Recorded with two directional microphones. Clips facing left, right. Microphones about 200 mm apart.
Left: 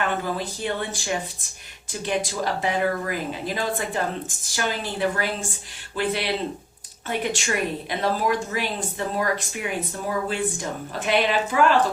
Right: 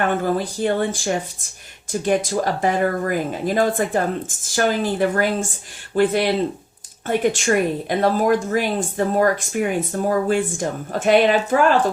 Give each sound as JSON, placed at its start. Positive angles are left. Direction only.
{"t": 0.0, "sound": "speech", "side_deg": -50}
{"t": 7.3, "sound": "speech", "side_deg": -50}